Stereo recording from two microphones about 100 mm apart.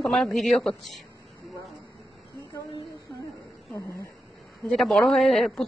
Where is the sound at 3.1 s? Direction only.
30° left (ahead or behind).